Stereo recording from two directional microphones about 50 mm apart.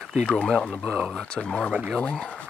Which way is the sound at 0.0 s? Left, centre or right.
Centre.